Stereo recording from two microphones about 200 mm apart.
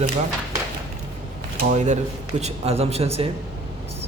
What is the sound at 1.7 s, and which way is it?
Speech, 35° right (ahead or behind).